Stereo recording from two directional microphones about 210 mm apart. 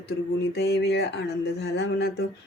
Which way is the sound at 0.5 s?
50° left (ahead or behind).